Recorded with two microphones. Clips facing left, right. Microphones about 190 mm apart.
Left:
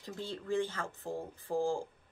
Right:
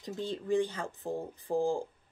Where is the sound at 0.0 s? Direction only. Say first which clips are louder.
Right 5 dB; 20° right (ahead or behind).